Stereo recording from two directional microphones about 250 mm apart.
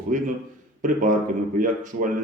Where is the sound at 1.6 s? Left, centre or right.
Right.